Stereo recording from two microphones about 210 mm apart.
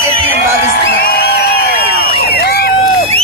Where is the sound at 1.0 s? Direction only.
50° left (ahead or behind).